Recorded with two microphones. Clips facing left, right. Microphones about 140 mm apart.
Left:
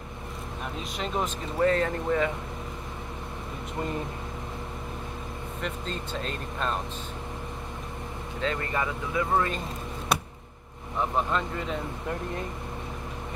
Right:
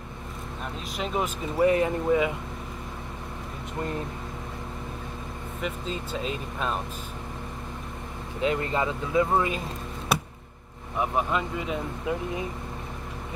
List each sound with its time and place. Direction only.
0.9 s speech: 5° right (ahead or behind)
5.6 s speech: 5° right (ahead or behind)
8.4 s speech: 20° right (ahead or behind)
9.3 s speech: 10° right (ahead or behind)
11.0 s speech: 10° right (ahead or behind)